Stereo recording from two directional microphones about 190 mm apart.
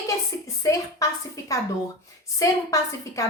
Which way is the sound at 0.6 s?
20° left (ahead or behind).